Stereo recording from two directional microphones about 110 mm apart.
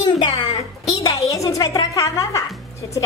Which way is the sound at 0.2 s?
45° left (ahead or behind).